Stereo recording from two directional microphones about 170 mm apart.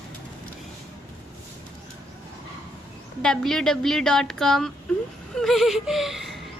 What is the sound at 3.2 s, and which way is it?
A woman's voice, 5° left (ahead or behind).